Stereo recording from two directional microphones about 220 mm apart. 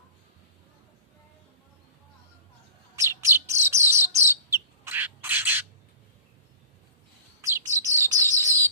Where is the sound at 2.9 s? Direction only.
10° right (ahead or behind).